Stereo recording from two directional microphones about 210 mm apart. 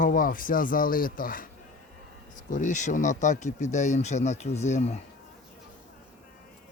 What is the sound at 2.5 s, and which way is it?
Speech, 35° left (ahead or behind).